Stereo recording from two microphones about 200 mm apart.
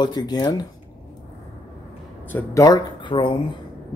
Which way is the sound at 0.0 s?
20° left (ahead or behind).